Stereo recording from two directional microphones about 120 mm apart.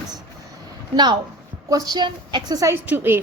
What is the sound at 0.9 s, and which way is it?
A woman's voice, 40° right (ahead or behind).